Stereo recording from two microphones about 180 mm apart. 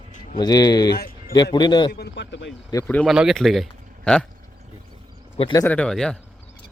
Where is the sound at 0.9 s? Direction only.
60° left (ahead or behind).